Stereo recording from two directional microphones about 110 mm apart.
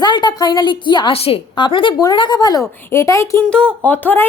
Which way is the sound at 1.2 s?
60° left (ahead or behind).